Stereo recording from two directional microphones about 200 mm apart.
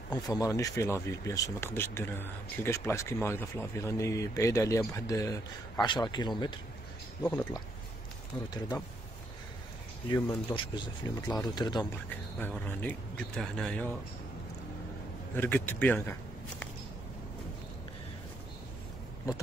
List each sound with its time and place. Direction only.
0.1 s speech: 15° left (ahead or behind)
10.1 s speech: 20° left (ahead or behind)
12.4 s speech: 10° left (ahead or behind)
15.3 s a man's voice: 10° left (ahead or behind)